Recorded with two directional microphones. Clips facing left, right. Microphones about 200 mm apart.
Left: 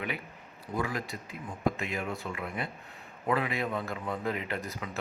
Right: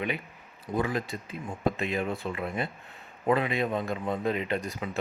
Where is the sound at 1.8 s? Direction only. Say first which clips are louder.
Right 5 dB; 30° right (ahead or behind).